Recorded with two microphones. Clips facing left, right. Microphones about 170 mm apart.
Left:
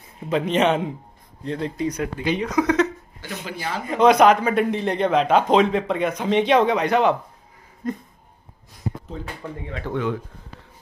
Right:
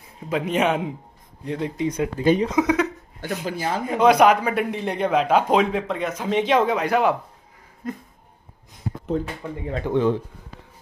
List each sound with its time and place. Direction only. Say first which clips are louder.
0.3 s a man's voice: left 2 dB; 5° right (ahead or behind)
1.9 s a man's voice: right 7 dB; 25° right (ahead or behind)
3.2 s speech: right 6 dB; 50° right (ahead or behind)
3.8 s a man's voice: left 1 dB; 5° right (ahead or behind)
7.8 s a sound: left 3 dB; 5° right (ahead or behind)
9.1 s speech: right 8 dB; 55° right (ahead or behind)
9.9 s speech: right 5 dB; 30° right (ahead or behind)